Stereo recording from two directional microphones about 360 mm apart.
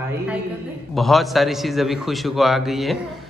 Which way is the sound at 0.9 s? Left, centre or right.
Centre.